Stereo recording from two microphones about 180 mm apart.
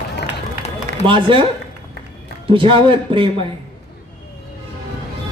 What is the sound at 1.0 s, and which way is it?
Speech, 30° right (ahead or behind).